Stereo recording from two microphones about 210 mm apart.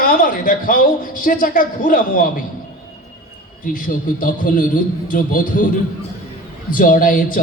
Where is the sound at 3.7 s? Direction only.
40° left (ahead or behind).